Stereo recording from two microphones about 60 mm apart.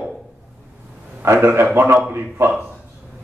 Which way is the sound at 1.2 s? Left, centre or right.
Right.